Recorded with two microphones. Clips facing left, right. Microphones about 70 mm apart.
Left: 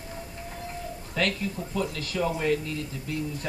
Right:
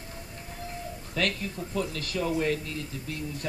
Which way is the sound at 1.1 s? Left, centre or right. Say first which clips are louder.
Left 2 dB; left.